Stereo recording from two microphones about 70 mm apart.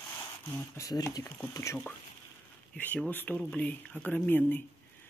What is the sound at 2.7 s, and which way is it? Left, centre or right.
Speech, left.